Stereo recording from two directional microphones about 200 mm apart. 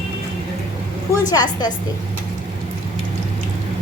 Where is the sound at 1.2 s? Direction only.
20° left (ahead or behind).